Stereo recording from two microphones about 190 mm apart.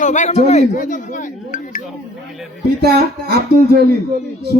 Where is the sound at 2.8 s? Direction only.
55° right (ahead or behind).